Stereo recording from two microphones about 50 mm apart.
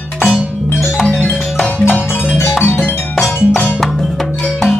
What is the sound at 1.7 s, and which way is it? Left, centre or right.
Music, left.